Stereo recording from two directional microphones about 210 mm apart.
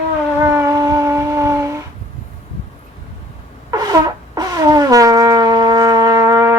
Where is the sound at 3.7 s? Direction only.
20° right (ahead or behind).